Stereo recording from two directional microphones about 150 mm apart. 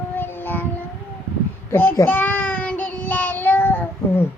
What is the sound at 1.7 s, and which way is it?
Child singing, 10° left (ahead or behind).